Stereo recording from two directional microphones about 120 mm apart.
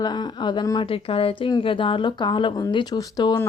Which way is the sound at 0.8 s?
50° left (ahead or behind).